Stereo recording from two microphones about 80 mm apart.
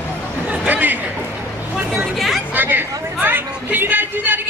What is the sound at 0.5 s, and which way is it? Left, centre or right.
Chatter, right.